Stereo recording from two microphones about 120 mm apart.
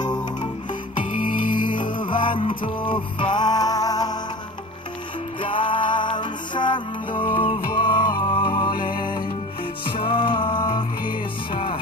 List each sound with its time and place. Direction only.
0.0 s music: 40° left (ahead or behind)
1.5 s music: 40° left (ahead or behind)
5.4 s music: 45° left (ahead or behind)